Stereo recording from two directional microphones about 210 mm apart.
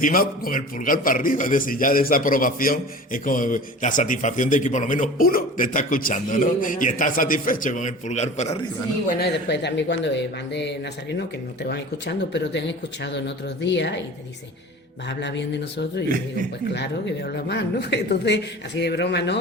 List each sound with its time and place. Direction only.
0.0 s a man's voice: 45° left (ahead or behind)
9.0 s speech: 50° left (ahead or behind)
15.2 s speech: 55° left (ahead or behind)
17.5 s speech: 55° left (ahead or behind)